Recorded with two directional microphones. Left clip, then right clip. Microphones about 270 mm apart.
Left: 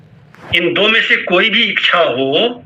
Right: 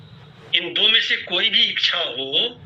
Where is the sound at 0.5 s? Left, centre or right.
Centre.